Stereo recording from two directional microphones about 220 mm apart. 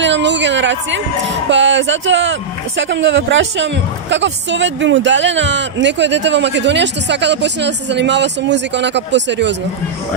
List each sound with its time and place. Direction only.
0.0 s a woman's voice: 55° right (ahead or behind)